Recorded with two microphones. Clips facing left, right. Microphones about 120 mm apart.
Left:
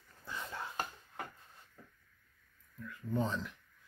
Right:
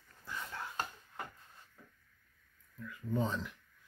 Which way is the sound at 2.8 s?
Centre (ahead or behind).